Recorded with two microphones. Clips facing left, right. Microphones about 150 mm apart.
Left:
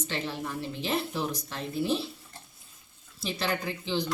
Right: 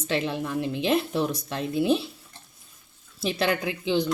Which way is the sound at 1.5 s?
75° right (ahead or behind).